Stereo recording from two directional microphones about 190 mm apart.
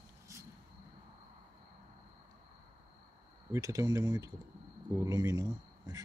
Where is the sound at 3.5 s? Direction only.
15° right (ahead or behind).